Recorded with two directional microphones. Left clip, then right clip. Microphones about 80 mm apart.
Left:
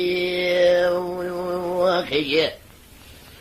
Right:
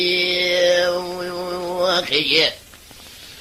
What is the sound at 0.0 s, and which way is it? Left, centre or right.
Mantra, right.